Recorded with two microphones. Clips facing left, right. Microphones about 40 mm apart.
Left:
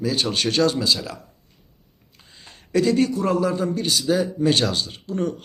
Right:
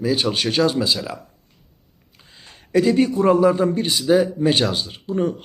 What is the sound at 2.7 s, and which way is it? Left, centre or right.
A man's voice, centre.